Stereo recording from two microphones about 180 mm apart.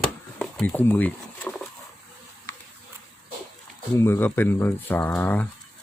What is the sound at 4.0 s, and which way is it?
Speech, 15° left (ahead or behind).